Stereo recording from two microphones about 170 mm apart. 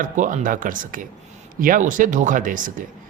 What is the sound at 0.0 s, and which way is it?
Speech, 50° right (ahead or behind).